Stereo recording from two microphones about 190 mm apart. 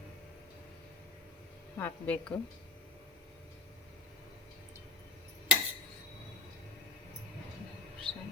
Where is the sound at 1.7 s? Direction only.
10° left (ahead or behind).